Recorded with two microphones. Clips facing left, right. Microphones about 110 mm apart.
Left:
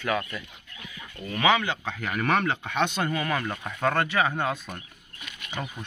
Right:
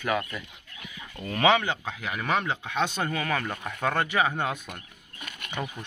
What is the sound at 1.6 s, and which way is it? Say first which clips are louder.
Speech: left 1 dB; 10° right (ahead or behind).